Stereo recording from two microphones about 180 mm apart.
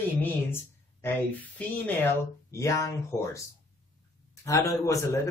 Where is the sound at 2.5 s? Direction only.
15° left (ahead or behind).